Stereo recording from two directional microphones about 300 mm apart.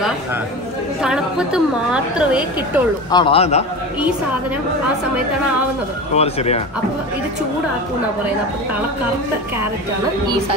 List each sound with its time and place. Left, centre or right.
1.0 s a woman's voice: centre
3.1 s a man's voice: centre
6.1 s a man's voice: centre